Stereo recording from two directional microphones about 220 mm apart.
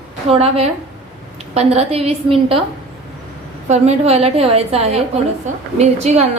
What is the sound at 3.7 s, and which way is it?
A woman's voice, 30° right (ahead or behind).